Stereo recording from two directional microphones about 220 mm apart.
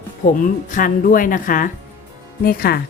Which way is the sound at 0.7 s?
40° left (ahead or behind).